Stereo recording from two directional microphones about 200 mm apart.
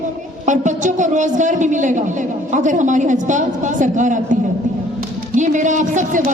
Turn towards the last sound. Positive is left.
turn(degrees=-40)  # may be behind; listen again after turning